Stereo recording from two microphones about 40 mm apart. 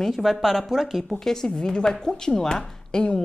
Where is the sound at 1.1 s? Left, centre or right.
Centre.